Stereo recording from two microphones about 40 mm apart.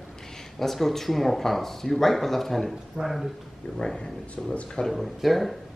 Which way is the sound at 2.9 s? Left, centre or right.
Centre.